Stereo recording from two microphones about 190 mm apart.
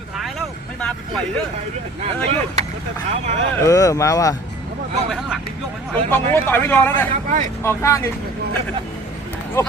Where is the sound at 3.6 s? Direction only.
15° left (ahead or behind).